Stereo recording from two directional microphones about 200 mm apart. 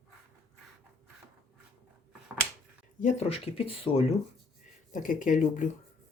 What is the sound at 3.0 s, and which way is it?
Speech, 30° left (ahead or behind).